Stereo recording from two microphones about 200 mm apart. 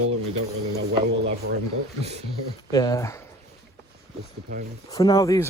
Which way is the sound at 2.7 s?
20° left (ahead or behind).